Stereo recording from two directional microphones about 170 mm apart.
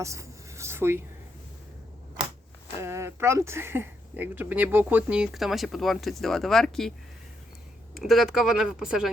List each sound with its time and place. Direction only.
0.0 s writing: 20° right (ahead or behind)
2.8 s speech: 15° right (ahead or behind); by 6.9 s centre (ahead or behind)
7.9 s speech: centre (ahead or behind)